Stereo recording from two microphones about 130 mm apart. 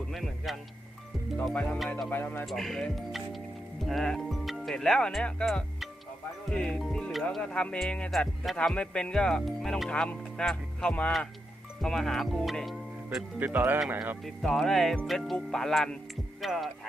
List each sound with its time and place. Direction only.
0.1 s a man's voice: centre (ahead or behind)
1.4 s speech: 10° left (ahead or behind)
2.5 s speech: centre (ahead or behind)
13.4 s speech: 15° right (ahead or behind)
14.2 s speech: centre (ahead or behind)
16.4 s music: centre (ahead or behind)